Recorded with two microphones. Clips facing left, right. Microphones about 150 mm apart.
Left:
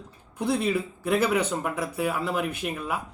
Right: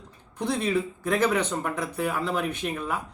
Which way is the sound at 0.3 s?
5° left (ahead or behind).